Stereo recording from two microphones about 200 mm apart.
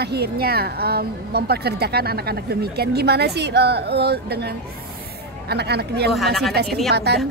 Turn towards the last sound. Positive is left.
turn(degrees=-55)  # may be behind; listen again after turning